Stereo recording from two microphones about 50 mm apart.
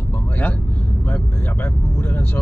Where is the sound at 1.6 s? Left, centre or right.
Left.